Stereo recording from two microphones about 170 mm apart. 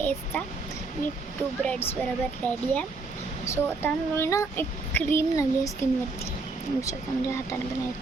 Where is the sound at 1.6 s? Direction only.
5° left (ahead or behind).